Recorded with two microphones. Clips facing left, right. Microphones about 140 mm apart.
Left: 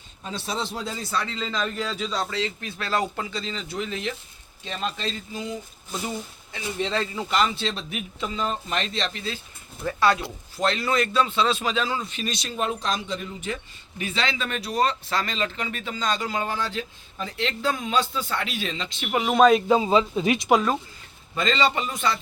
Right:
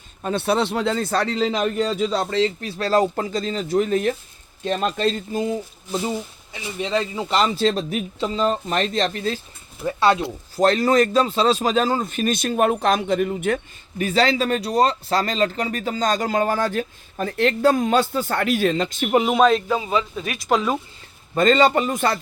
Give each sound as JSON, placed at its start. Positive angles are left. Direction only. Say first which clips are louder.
{"t": 0.2, "sound": "speech", "louder": "right 10 dB", "side_deg": -60}
{"t": 1.1, "sound": "speech", "louder": "right 5 dB", "side_deg": -40}
{"t": 1.5, "sound": "speech", "louder": "right 7 dB", "side_deg": -60}
{"t": 2.3, "sound": "a man's voice", "louder": "right 8 dB", "side_deg": -35}
{"t": 6.5, "sound": "speech", "louder": "right 3 dB", "side_deg": -10}
{"t": 7.3, "sound": "speech", "louder": "right 6 dB", "side_deg": -35}
{"t": 9.8, "sound": "speech", "louder": "right 3 dB", "side_deg": -20}
{"t": 10.6, "sound": "a man's voice", "louder": "right 7 dB", "side_deg": -40}
{"t": 14.0, "sound": "a man's voice", "louder": "right 9 dB", "side_deg": -40}
{"t": 19.3, "sound": "a man's voice", "louder": "left 3 dB", "side_deg": 0}
{"t": 19.6, "sound": "speech", "louder": "left 3 dB", "side_deg": 25}
{"t": 21.3, "sound": "a man's voice", "louder": "right 7 dB", "side_deg": -50}